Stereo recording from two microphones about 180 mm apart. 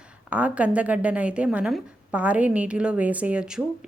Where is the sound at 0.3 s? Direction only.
10° right (ahead or behind).